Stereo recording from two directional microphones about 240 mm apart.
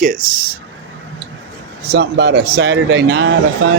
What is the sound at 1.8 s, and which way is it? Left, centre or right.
Speech, right.